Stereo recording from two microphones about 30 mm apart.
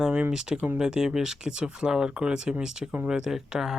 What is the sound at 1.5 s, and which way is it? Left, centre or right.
Speech, right.